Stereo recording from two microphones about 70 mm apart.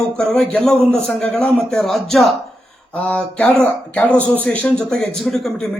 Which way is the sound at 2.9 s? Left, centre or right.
Centre.